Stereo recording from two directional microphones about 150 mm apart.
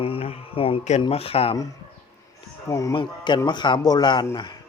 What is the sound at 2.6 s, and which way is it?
Speech, 20° left (ahead or behind).